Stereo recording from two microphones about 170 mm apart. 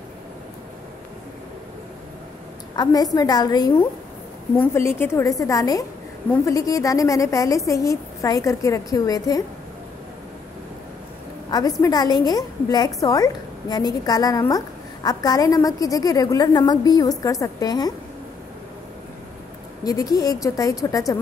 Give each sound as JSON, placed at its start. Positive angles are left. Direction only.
{"t": 2.7, "sound": "a woman's voice", "side_deg": 25}
{"t": 11.5, "sound": "a woman's voice", "side_deg": 20}
{"t": 19.8, "sound": "a woman's voice", "side_deg": 20}